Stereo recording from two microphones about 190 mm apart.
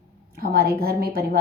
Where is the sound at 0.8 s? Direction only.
55° right (ahead or behind).